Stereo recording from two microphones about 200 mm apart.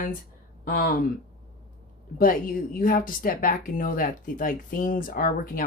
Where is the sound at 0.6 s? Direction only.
45° left (ahead or behind).